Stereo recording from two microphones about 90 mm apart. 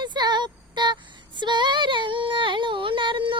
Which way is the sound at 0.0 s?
55° right (ahead or behind).